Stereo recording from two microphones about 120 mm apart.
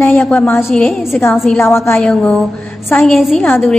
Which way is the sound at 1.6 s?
20° left (ahead or behind).